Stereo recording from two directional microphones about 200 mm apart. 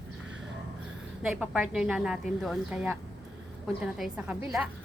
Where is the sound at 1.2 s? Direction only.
5° right (ahead or behind).